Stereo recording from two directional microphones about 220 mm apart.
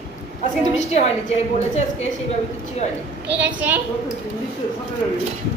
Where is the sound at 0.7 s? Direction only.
30° left (ahead or behind).